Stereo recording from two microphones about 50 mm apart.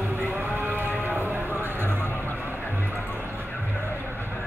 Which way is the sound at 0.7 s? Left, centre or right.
Right.